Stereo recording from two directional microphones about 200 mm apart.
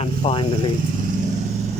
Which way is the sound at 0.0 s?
30° left (ahead or behind).